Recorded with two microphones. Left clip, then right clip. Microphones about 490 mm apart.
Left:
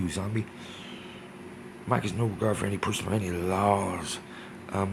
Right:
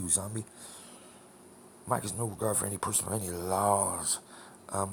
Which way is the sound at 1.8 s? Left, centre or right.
Right.